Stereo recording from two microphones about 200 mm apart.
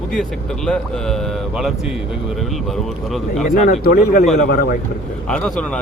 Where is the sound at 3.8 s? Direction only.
50° left (ahead or behind).